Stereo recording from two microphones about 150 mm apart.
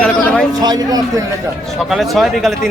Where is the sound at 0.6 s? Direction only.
25° right (ahead or behind).